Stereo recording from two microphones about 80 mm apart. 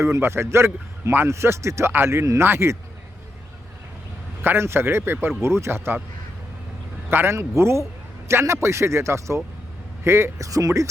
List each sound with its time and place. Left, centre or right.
0.0 s a man's voice: right
4.4 s a man's voice: right
7.1 s a man's voice: right